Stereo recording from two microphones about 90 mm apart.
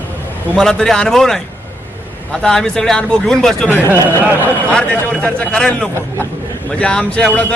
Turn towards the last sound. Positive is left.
turn(degrees=15)  # may be behind; listen again after turning